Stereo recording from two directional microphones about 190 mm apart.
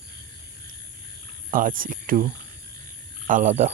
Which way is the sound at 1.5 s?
45° right (ahead or behind).